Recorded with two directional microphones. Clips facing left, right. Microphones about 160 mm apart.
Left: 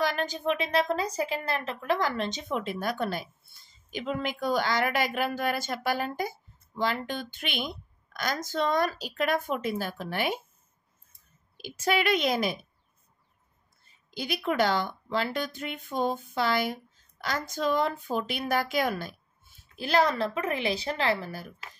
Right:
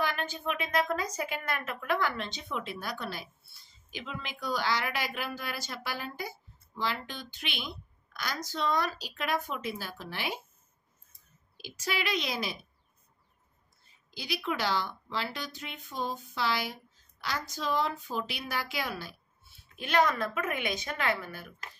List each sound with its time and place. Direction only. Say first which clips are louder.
0.0 s a woman's voice: left 5 dB; 40° left (ahead or behind)
11.5 s speech: left 8 dB; 50° left (ahead or behind)
14.1 s speech: left 6 dB; 50° left (ahead or behind)
19.8 s a woman's voice: left 3 dB; 35° left (ahead or behind)